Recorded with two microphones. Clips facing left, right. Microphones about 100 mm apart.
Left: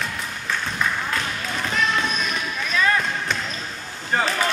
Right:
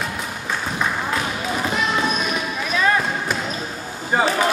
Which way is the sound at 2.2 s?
10° right (ahead or behind).